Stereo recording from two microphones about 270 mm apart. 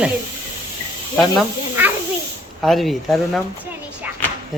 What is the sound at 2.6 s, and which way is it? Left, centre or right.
Speech, centre.